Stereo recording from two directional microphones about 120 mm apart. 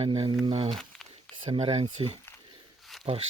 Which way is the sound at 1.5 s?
60° right (ahead or behind).